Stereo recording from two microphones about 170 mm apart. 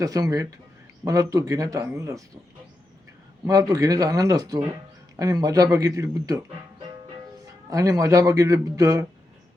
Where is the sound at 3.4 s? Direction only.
20° right (ahead or behind).